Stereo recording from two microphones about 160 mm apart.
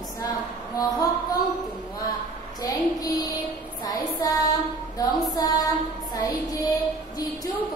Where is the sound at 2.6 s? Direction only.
25° left (ahead or behind).